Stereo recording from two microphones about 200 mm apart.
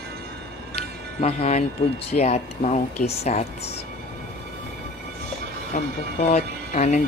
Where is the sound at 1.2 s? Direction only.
30° left (ahead or behind).